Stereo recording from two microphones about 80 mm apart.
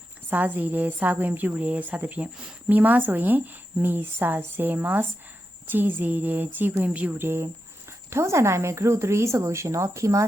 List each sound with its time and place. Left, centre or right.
0.3 s a woman's voice: right